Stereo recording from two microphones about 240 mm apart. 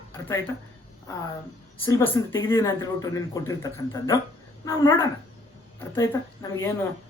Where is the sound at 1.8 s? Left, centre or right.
Centre.